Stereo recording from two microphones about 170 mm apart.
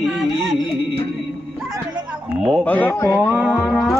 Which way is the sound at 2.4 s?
5° right (ahead or behind).